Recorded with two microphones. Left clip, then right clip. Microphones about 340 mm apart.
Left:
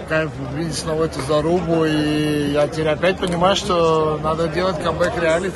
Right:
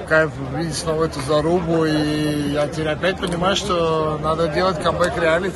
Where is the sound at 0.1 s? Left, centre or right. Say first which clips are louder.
Right 4 dB; centre.